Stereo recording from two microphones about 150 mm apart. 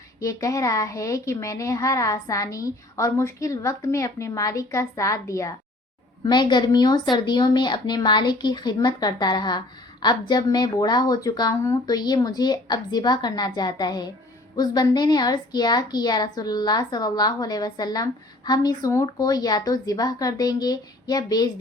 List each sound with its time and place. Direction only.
0.2 s a woman's voice: 20° left (ahead or behind)